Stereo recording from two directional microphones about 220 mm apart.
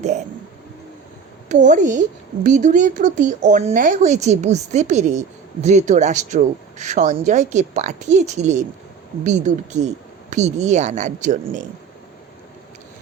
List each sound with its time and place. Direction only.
1.5 s a woman's voice: 35° right (ahead or behind)